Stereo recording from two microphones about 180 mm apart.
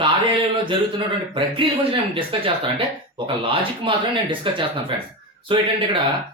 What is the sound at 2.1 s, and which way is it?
Speech, 30° right (ahead or behind).